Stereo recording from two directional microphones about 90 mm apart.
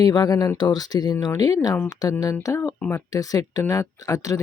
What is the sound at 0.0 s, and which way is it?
Speech, 45° left (ahead or behind).